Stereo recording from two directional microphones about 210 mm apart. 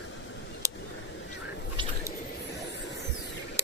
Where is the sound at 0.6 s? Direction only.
15° right (ahead or behind).